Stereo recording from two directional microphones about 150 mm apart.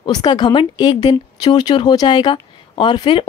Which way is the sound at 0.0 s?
30° left (ahead or behind).